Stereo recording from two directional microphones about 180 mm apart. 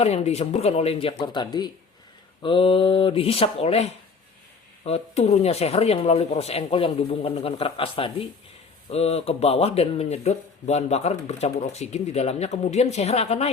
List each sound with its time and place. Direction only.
0.0 s speech: 35° left (ahead or behind)